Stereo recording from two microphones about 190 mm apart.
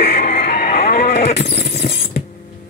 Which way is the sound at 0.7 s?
55° left (ahead or behind).